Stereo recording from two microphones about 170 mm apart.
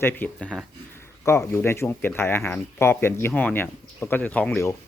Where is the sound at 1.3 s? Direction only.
15° left (ahead or behind).